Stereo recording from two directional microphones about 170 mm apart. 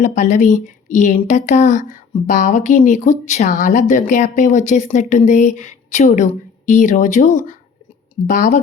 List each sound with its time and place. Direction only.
0.0 s speech: 45° left (ahead or behind)